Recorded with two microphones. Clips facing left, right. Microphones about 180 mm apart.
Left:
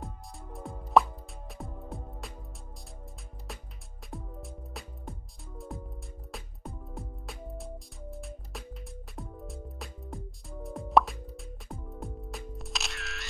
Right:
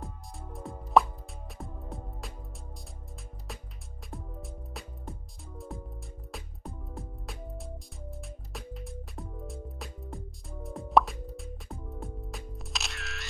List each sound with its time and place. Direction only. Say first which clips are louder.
0.0 s music: even; centre (ahead or behind)
4.1 s music: left 1 dB; centre (ahead or behind)